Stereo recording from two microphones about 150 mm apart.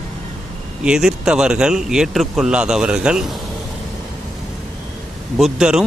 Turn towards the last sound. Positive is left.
turn(degrees=-5)  # may be behind; listen again after turning